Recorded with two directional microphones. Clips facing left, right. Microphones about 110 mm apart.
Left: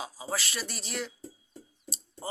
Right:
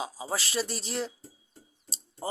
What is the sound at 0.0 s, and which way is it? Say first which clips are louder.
Speech: right 2 dB; 25° right (ahead or behind).